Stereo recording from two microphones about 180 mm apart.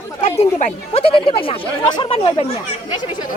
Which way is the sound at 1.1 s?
30° left (ahead or behind).